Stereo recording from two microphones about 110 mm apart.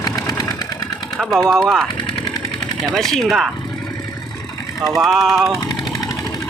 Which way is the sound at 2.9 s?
5° left (ahead or behind).